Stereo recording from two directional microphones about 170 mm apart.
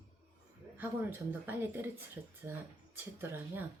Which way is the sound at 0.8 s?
10° right (ahead or behind).